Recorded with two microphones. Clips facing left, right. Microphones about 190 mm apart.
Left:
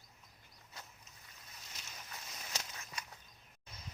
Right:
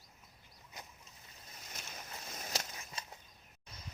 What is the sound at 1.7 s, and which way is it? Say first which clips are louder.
Boat: right 6 dB; 55° right (ahead or behind).